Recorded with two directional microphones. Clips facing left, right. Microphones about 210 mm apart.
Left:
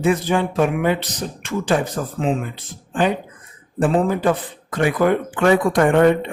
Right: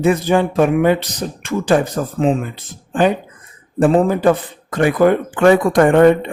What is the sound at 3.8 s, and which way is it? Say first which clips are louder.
Speech: right 5 dB; 45° right (ahead or behind).